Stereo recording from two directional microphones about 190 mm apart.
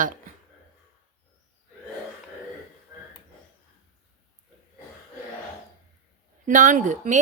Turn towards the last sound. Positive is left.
turn(degrees=-40)  # may be behind; listen again after turning